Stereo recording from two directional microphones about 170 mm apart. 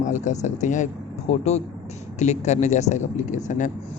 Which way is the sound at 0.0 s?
45° left (ahead or behind).